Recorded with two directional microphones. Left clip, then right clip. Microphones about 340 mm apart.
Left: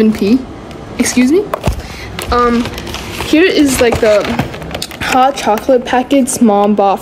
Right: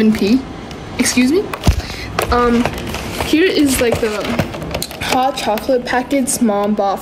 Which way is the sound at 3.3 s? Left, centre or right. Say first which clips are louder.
Left 4 dB; centre.